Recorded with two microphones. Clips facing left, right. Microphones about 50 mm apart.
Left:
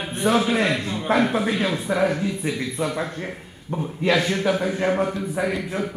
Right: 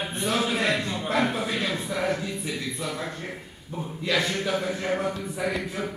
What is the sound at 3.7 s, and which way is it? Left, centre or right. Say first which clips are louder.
Speech: left 7 dB; left.